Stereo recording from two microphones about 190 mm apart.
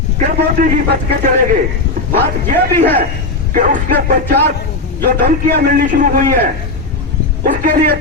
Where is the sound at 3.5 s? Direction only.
45° right (ahead or behind).